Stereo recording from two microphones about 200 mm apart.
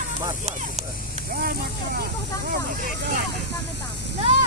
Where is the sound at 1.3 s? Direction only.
45° right (ahead or behind).